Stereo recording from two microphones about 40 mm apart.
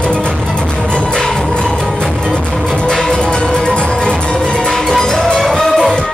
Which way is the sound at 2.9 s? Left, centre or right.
Centre.